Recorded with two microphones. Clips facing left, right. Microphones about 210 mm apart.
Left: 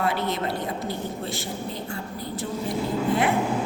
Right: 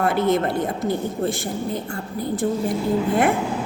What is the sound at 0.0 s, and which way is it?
A woman's voice, 50° right (ahead or behind).